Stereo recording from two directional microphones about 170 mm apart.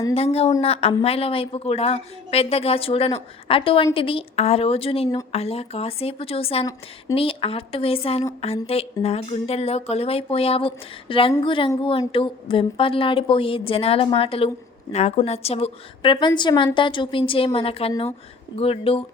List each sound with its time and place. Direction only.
0.1 s a woman's voice: 35° left (ahead or behind)